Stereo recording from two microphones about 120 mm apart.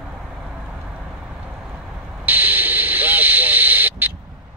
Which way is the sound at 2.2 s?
15° right (ahead or behind).